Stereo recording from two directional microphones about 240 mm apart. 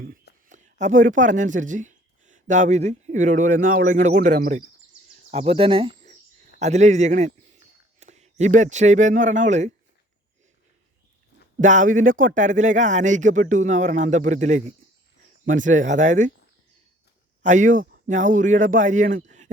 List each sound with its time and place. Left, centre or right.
0.4 s a man's voice: right
11.6 s speech: right
17.4 s speech: right